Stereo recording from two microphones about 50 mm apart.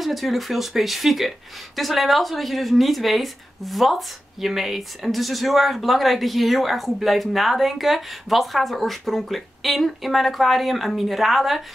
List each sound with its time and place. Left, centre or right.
0.0 s a woman's voice: centre